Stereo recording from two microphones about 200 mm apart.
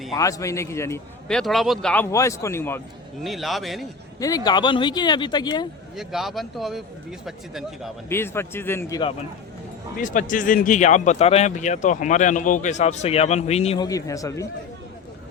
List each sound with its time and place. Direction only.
0.1 s a man's voice: 15° left (ahead or behind)
1.3 s a man's voice: centre (ahead or behind)
3.2 s a man's voice: centre (ahead or behind)
4.2 s speech: 20° left (ahead or behind)
6.0 s a man's voice: centre (ahead or behind)
8.1 s a man's voice: 10° left (ahead or behind)
10.0 s speech: 40° left (ahead or behind)
13.7 s a man's voice: 15° left (ahead or behind)